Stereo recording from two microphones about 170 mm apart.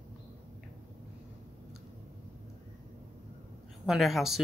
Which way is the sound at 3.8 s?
Centre (ahead or behind).